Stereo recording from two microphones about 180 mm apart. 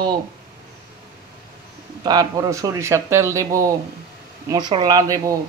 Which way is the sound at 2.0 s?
20° right (ahead or behind).